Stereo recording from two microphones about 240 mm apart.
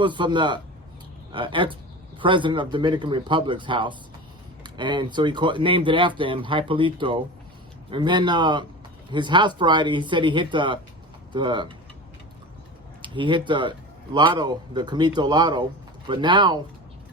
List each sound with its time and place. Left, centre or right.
0.0 s a man's voice: centre
13.0 s a man's voice: centre